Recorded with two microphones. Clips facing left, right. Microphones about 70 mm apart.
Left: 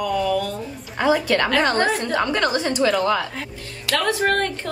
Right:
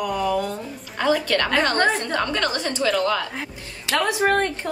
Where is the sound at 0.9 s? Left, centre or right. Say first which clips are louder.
Left 2 dB; centre.